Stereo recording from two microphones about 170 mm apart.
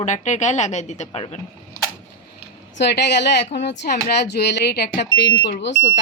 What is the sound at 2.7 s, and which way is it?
Speech, 80° left.